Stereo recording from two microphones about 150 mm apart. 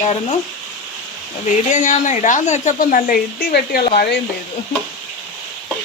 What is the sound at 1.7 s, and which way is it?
A woman's voice, 55° left (ahead or behind).